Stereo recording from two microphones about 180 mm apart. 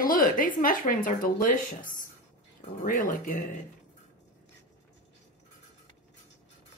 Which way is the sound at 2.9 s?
50° left (ahead or behind).